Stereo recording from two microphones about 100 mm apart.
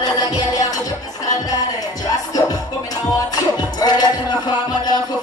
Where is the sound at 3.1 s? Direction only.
40° left (ahead or behind).